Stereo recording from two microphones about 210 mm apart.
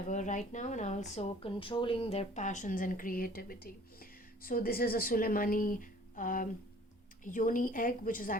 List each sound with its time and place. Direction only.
0.1 s a woman's voice: 35° left (ahead or behind)